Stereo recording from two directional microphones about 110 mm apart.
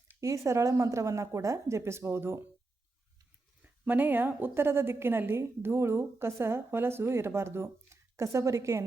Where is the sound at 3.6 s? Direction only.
15° right (ahead or behind).